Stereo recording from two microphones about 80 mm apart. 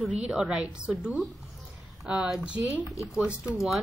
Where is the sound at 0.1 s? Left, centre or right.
Centre.